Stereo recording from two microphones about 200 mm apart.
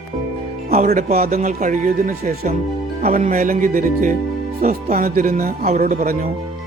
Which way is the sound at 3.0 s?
45° right (ahead or behind).